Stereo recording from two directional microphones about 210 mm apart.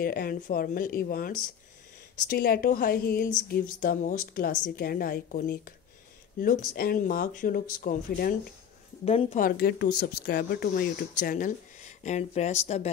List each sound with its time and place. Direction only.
0.0 s a woman's voice: 45° left (ahead or behind)
9.0 s a woman's voice: 30° left (ahead or behind)